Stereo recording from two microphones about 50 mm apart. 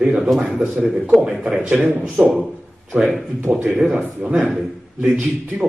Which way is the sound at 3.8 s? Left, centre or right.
Centre.